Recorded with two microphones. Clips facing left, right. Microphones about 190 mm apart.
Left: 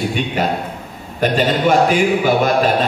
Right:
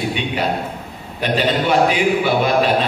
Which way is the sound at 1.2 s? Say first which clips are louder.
Left 3 dB; 45° left (ahead or behind).